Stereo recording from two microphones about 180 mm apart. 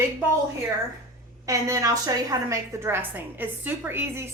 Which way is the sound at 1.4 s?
20° right (ahead or behind).